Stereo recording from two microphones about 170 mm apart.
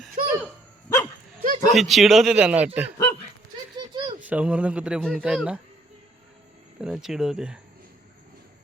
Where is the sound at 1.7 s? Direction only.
Centre (ahead or behind).